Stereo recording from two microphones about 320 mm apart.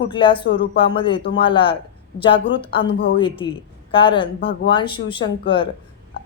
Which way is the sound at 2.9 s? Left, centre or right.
Left.